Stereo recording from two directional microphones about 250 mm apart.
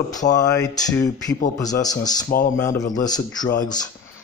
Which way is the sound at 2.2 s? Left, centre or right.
Left.